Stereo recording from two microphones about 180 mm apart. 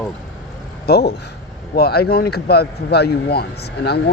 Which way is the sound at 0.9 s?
65° left (ahead or behind).